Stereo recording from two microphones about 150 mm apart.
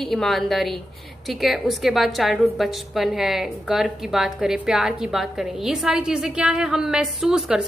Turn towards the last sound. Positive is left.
turn(degrees=-5)  # may be behind; listen again after turning